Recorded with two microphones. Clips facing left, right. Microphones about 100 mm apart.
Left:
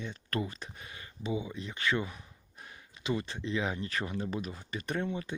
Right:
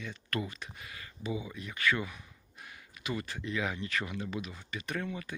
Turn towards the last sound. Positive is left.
turn(degrees=30)  # may be behind; listen again after turning